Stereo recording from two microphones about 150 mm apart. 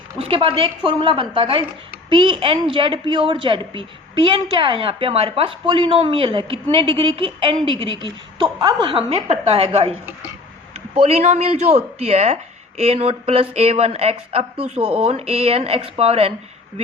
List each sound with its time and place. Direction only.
0.2 s a woman's voice: 40° right (ahead or behind)